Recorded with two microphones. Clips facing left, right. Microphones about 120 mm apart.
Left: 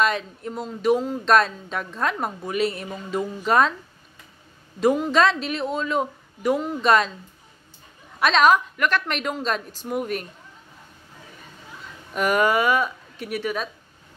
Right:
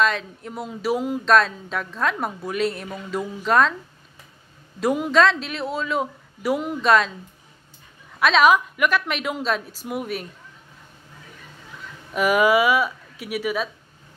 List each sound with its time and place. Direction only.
0.0 s speech: centre (ahead or behind)
4.7 s speech: 5° right (ahead or behind)
8.2 s speech: 5° right (ahead or behind)
12.1 s speech: 5° right (ahead or behind)